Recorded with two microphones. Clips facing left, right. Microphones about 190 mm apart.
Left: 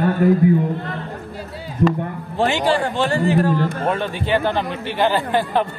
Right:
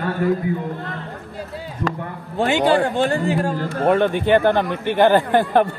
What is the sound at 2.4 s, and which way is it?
A man's voice, 55° right (ahead or behind).